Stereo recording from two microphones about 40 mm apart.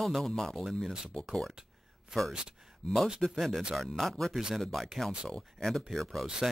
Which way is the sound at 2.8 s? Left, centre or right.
Left.